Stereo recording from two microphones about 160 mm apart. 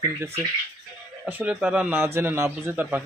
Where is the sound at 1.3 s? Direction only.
10° right (ahead or behind).